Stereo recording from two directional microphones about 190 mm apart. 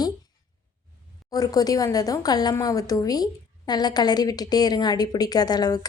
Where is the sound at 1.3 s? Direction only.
20° left (ahead or behind).